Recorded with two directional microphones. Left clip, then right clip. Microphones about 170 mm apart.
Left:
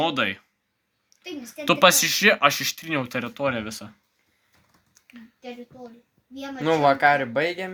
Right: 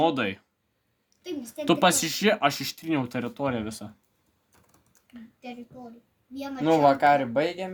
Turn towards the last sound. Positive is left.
turn(degrees=10)  # may be behind; listen again after turning